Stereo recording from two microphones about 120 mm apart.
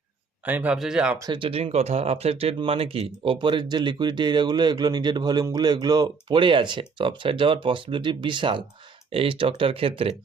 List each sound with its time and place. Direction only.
0.4 s speech: 15° right (ahead or behind)
1.3 s speech: 50° right (ahead or behind)